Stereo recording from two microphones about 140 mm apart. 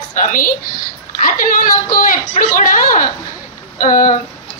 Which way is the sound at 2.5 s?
70° left (ahead or behind).